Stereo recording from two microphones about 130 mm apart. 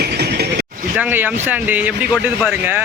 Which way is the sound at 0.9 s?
15° right (ahead or behind).